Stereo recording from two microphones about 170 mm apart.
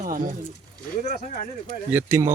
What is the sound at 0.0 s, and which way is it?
Speech, 50° right (ahead or behind).